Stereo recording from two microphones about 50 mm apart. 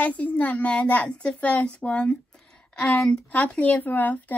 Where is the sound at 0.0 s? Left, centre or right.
Left.